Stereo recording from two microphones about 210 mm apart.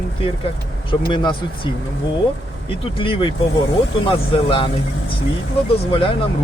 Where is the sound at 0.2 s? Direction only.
25° left (ahead or behind).